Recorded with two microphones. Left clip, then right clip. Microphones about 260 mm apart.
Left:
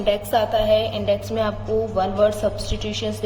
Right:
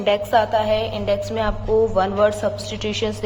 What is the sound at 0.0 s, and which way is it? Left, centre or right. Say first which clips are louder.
A woman's voice: right 2 dB; centre.